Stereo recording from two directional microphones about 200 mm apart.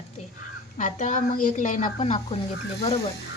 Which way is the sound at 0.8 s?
40° left (ahead or behind).